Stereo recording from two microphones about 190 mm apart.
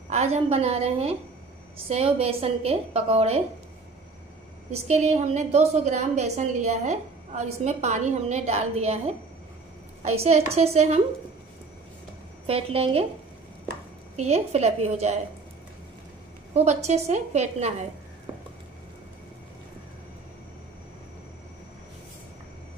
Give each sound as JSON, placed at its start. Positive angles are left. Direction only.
{"t": 0.1, "sound": "a woman's voice", "side_deg": -35}
{"t": 4.8, "sound": "a woman's voice", "side_deg": -40}
{"t": 10.0, "sound": "a woman's voice", "side_deg": -35}
{"t": 12.4, "sound": "a woman's voice", "side_deg": -30}
{"t": 14.1, "sound": "a woman's voice", "side_deg": -35}
{"t": 16.5, "sound": "a woman's voice", "side_deg": -35}